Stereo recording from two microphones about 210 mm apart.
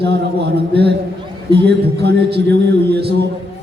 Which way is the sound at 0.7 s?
50° right (ahead or behind).